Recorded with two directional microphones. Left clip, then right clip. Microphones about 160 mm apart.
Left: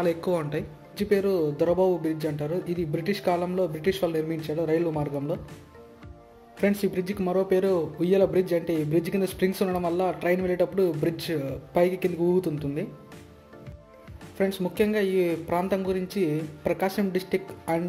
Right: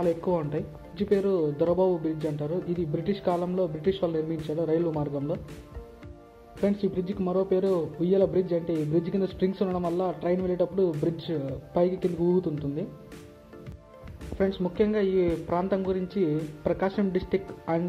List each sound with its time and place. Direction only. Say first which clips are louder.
0.0 s speech: left 1 dB; 25° left (ahead or behind)
4.9 s speech: left 1 dB; 25° left (ahead or behind)
6.6 s speech: left 2 dB; 20° left (ahead or behind)
14.4 s speech: left 1 dB; 20° left (ahead or behind)